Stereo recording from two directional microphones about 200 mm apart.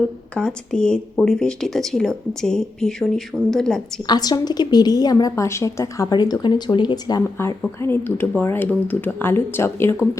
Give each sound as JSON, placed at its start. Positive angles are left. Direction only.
{"t": 0.3, "sound": "speech", "side_deg": 5}
{"t": 4.0, "sound": "a woman's voice", "side_deg": 20}